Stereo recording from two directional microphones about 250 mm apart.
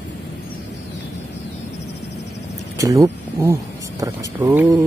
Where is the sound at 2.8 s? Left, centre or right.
Centre.